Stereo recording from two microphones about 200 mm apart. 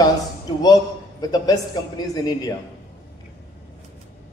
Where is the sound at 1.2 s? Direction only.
20° left (ahead or behind).